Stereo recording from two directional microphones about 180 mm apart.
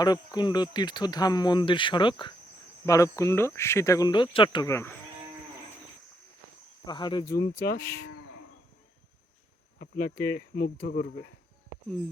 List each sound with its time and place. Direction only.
0.0 s speech: 20° left (ahead or behind)
6.8 s speech: 25° left (ahead or behind)
7.6 s speech: 55° left (ahead or behind)
9.7 s speech: 55° left (ahead or behind)